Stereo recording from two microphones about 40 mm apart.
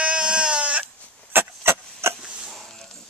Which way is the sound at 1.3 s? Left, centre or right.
Right.